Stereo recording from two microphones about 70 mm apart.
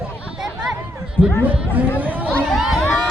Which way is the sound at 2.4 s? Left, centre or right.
Centre.